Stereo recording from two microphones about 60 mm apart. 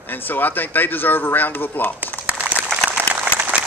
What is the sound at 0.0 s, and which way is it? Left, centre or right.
A man's voice, left.